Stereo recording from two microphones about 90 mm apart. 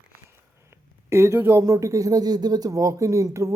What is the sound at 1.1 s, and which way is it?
Speech, 30° right (ahead or behind).